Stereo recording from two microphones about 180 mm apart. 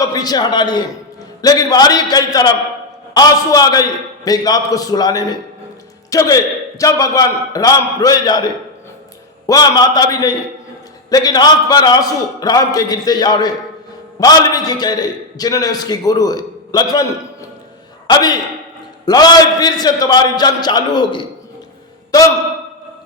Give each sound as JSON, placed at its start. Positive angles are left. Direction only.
{"t": 0.0, "sound": "a man's voice", "side_deg": 20}
{"t": 9.5, "sound": "a man's voice", "side_deg": 20}
{"t": 18.1, "sound": "a man's voice", "side_deg": 20}